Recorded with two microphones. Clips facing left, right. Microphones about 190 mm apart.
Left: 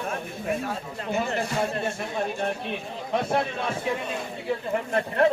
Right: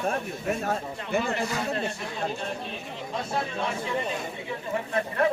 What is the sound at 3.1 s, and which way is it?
Speech, 65° left (ahead or behind).